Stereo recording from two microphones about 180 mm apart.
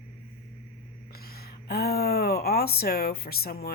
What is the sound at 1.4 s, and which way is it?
Speech, 60° left (ahead or behind).